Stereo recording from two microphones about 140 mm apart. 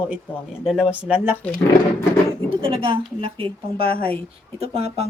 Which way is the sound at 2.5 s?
35° right (ahead or behind).